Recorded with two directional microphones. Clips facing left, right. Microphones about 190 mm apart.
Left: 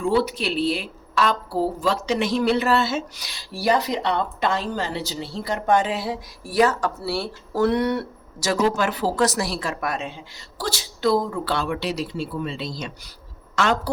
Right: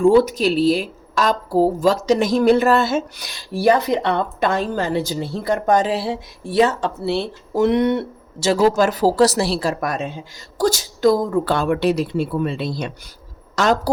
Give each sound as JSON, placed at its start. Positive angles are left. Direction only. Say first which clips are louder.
{"t": 0.0, "sound": "speech", "louder": "right 8 dB", "side_deg": -45}
{"t": 8.7, "sound": "a woman's voice", "louder": "right 7 dB", "side_deg": -40}
{"t": 13.6, "sound": "speech", "louder": "right 4 dB", "side_deg": -40}